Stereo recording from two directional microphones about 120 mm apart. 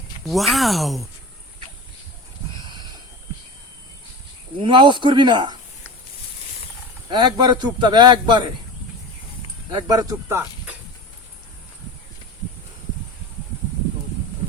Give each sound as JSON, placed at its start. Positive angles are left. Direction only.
{"t": 0.3, "sound": "speech", "side_deg": 0}
{"t": 2.6, "sound": "a sound", "side_deg": -35}
{"t": 4.6, "sound": "a man's voice", "side_deg": -40}
{"t": 7.1, "sound": "a man's voice", "side_deg": -40}
{"t": 9.7, "sound": "a man's voice", "side_deg": -35}